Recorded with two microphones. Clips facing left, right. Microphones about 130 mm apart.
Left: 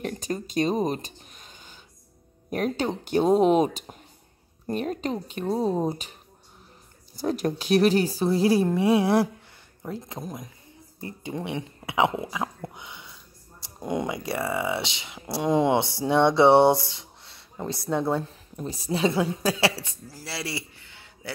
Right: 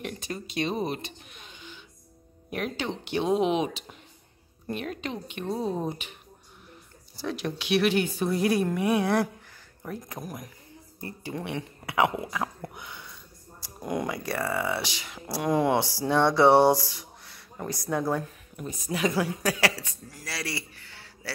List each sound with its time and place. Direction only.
0.0 s a sound: 40° left (ahead or behind)
2.5 s a woman's voice: 40° left (ahead or behind)
7.2 s a woman's voice: 45° left (ahead or behind); by 21.3 s 20° left (ahead or behind)